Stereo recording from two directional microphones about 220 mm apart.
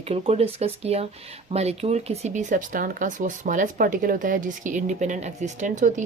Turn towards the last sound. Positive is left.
turn(degrees=-35)  # may be behind; listen again after turning